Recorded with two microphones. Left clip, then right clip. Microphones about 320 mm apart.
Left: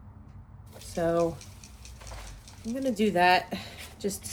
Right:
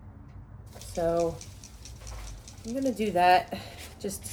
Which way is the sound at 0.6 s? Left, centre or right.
Left.